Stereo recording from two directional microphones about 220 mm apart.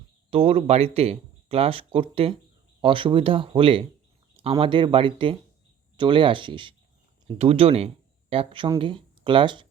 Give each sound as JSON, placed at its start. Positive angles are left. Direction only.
{"t": 0.3, "sound": "speech", "side_deg": -25}